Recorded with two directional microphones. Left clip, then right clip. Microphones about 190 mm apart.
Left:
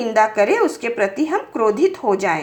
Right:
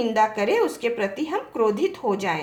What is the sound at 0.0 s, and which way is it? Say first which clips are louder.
A woman's voice: left 5 dB; 30° left (ahead or behind).